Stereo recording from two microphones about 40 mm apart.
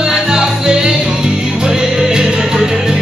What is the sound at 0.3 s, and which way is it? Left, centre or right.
Music, centre.